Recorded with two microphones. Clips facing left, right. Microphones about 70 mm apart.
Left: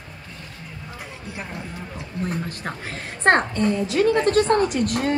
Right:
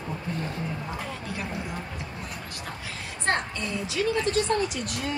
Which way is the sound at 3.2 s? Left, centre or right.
Left.